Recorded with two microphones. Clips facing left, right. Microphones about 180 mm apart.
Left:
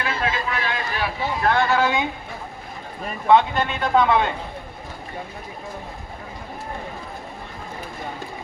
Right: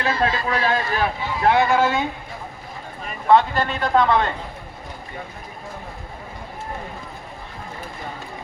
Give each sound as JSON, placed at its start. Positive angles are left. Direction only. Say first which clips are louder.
{"t": 0.0, "sound": "a sound", "louder": "right 3 dB", "side_deg": -35}
{"t": 1.5, "sound": "speech", "louder": "right 3 dB", "side_deg": -15}
{"t": 3.2, "sound": "a man's voice", "louder": "even", "side_deg": 0}